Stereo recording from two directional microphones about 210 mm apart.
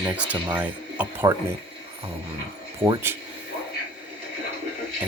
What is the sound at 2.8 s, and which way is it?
Speech, 10° right (ahead or behind).